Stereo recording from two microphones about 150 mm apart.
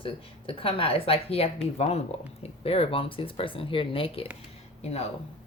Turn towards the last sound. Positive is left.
turn(degrees=45)  # may be behind; listen again after turning